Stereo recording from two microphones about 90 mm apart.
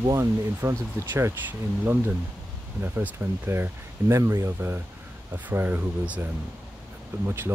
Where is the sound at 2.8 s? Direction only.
25° right (ahead or behind).